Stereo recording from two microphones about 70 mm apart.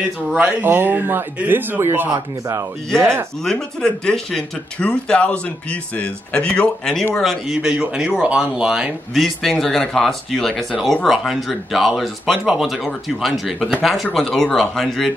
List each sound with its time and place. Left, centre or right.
0.5 s speech: right
3.4 s speech: centre
7.5 s speech: centre
9.1 s speech: centre